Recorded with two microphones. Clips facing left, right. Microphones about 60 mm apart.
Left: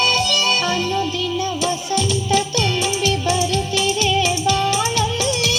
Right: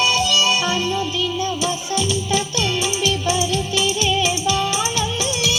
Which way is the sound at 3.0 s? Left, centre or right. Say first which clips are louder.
Left 1 dB; left.